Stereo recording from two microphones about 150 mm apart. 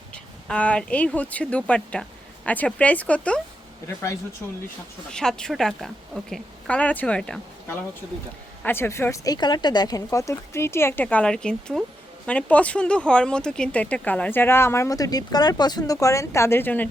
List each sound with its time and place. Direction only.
0.1 s speech: 5° left (ahead or behind)
5.1 s a woman's voice: 5° left (ahead or behind)